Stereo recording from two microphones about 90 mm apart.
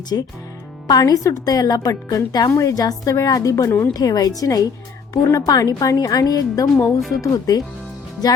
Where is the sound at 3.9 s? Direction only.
45° left (ahead or behind).